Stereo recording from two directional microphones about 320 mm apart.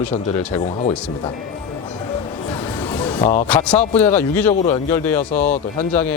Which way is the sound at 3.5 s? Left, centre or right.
Centre.